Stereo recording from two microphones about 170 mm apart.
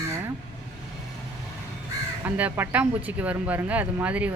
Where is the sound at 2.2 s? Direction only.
10° right (ahead or behind).